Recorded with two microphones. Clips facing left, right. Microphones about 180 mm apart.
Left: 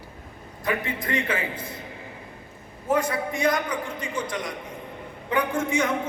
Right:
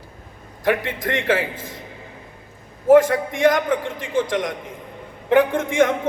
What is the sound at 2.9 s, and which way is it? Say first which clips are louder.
Speech: right 11 dB; 90° right.